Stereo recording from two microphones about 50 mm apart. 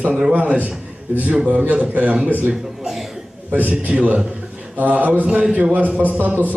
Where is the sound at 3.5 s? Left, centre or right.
Right.